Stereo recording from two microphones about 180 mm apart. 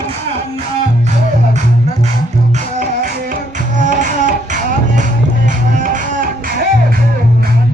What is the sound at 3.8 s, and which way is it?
Music, 45° right (ahead or behind).